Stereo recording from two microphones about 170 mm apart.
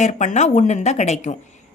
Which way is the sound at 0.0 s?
45° left (ahead or behind).